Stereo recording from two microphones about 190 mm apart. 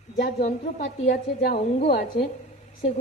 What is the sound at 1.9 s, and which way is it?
Speech, 60° left (ahead or behind).